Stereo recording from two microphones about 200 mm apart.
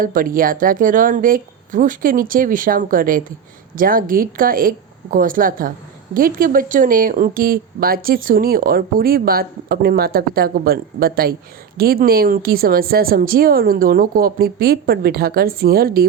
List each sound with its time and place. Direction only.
0.0 s a woman's voice: 45° right (ahead or behind)